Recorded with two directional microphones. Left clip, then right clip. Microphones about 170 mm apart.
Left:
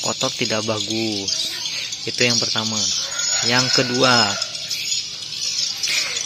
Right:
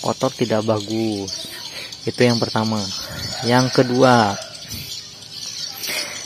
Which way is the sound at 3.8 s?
30° right (ahead or behind).